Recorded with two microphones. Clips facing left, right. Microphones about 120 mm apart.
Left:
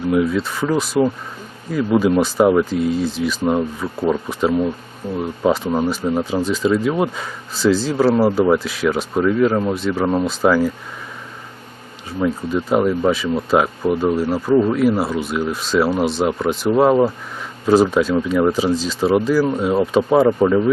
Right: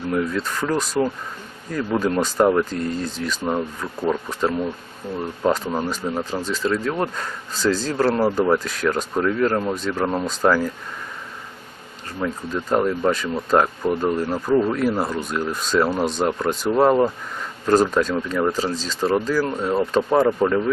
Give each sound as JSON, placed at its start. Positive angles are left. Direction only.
{"t": 0.1, "sound": "speech", "side_deg": 5}
{"t": 12.0, "sound": "speech", "side_deg": 10}